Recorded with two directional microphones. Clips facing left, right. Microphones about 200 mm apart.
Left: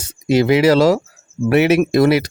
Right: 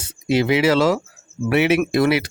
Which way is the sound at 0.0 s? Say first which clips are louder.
Left 4 dB; 40° left (ahead or behind).